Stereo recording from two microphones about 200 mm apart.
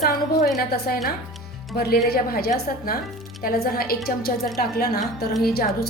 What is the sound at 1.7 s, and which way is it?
A woman's voice, 50° left (ahead or behind).